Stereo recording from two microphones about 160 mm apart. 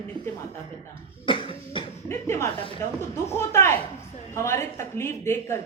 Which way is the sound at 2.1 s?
15° left (ahead or behind).